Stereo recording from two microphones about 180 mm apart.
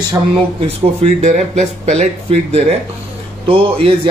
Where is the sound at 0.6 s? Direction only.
40° right (ahead or behind).